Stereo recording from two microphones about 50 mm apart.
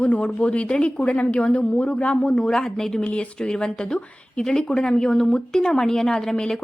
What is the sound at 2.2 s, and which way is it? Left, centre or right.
Speech, centre.